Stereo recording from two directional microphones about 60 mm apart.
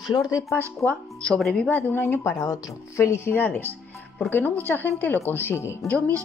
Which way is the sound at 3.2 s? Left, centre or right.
Left.